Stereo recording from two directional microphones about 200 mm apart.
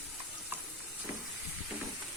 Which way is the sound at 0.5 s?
10° right (ahead or behind).